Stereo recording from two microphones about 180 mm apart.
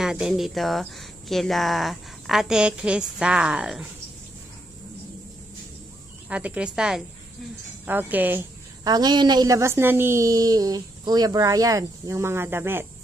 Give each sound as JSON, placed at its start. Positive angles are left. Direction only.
{"t": 0.0, "sound": "speech", "side_deg": -5}
{"t": 6.2, "sound": "a woman's voice", "side_deg": -5}
{"t": 8.8, "sound": "a woman's voice", "side_deg": -25}